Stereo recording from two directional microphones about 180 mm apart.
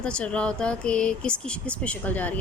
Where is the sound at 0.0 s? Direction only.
5° left (ahead or behind).